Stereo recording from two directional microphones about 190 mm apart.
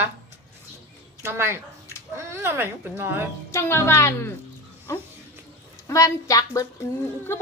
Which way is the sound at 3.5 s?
15° left (ahead or behind).